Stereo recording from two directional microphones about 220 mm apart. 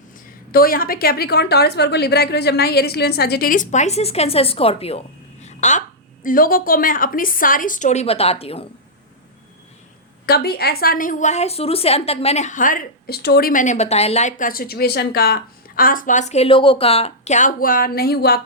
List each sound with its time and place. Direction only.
0.5 s a woman's voice: 40° left (ahead or behind); by 8.6 s 25° left (ahead or behind)
10.2 s a woman's voice: 45° left (ahead or behind)